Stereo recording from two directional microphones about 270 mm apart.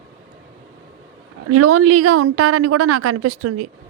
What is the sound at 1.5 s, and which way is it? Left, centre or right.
Speech, right.